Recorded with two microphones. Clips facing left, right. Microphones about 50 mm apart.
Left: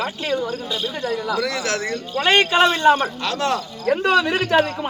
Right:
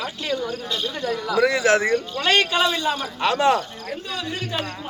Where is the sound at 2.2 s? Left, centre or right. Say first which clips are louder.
Left 5 dB; left.